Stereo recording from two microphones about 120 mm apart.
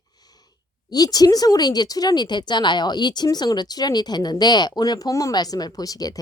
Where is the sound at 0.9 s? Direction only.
30° left (ahead or behind).